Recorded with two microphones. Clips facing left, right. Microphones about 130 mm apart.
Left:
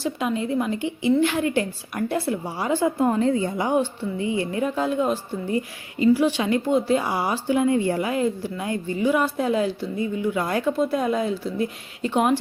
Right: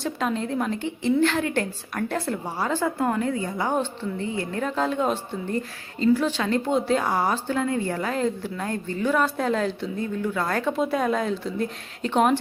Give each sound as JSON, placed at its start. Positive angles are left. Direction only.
{"t": 0.0, "sound": "a woman's voice", "side_deg": 5}
{"t": 3.7, "sound": "a woman's voice", "side_deg": 10}
{"t": 10.7, "sound": "speech", "side_deg": 0}